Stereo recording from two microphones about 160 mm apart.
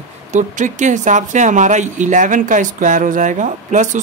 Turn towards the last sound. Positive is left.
turn(degrees=-50)  # may be behind; listen again after turning